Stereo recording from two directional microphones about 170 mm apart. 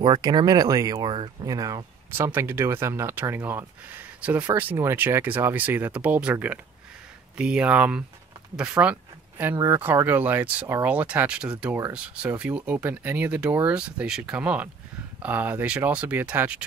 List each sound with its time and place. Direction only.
0.0 s speech: 25° right (ahead or behind); by 16.6 s 10° right (ahead or behind)